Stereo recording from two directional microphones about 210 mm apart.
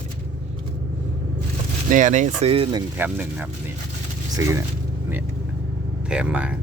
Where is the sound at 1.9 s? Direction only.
35° right (ahead or behind).